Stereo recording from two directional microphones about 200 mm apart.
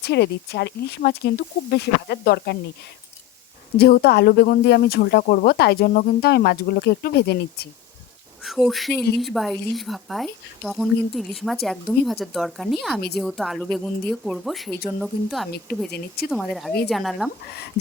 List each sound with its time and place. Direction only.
0.0 s speech: 55° left (ahead or behind)
3.8 s speech: 50° left (ahead or behind)
8.4 s speech: centre (ahead or behind)